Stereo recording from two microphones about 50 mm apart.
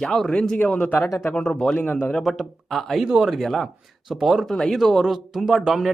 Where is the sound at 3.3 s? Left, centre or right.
Centre.